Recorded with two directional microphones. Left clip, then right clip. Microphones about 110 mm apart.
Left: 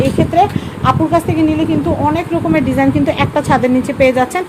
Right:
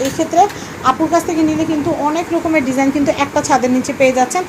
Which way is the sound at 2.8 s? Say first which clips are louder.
Left 1 dB; 20° left (ahead or behind).